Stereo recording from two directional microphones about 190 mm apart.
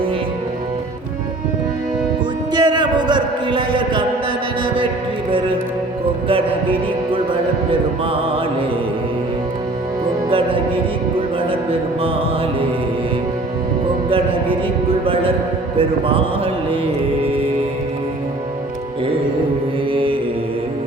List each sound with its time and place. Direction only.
2.5 s music: 25° right (ahead or behind)
4.6 s mantra: 25° right (ahead or behind)
10.2 s music: 30° right (ahead or behind)
15.0 s music: 30° right (ahead or behind)
19.9 s mantra: 25° right (ahead or behind)